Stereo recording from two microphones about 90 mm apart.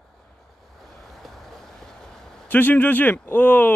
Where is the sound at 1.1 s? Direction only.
Centre (ahead or behind).